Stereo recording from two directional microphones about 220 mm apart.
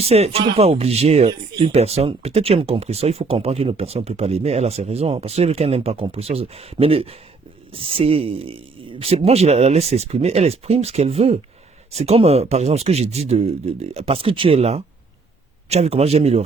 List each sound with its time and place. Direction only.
0.0 s speech: 30° right (ahead or behind)